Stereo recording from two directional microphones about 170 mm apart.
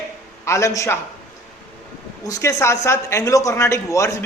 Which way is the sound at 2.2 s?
20° left (ahead or behind).